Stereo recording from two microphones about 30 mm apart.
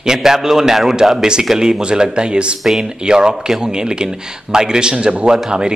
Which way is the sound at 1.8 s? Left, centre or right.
Right.